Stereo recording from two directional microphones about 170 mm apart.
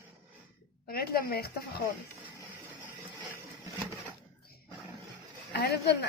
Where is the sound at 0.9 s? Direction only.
60° left (ahead or behind).